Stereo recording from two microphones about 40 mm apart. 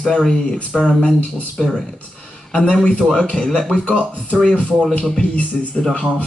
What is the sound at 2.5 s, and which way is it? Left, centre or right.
Speech, left.